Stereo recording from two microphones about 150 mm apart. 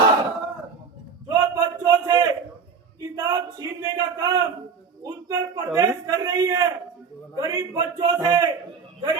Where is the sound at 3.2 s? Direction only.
25° right (ahead or behind).